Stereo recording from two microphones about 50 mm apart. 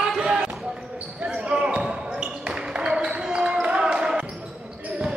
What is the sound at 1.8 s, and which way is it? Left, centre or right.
Basketball bounce, centre.